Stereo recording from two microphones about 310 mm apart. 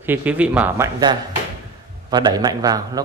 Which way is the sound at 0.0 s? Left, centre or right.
Centre.